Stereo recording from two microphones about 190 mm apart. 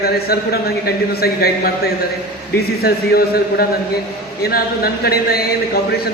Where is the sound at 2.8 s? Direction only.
55° left (ahead or behind).